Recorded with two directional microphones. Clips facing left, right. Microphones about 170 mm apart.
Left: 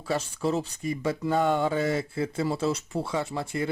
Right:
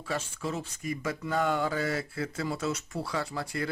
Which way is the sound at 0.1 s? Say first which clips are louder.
Left 6 dB; 35° left (ahead or behind).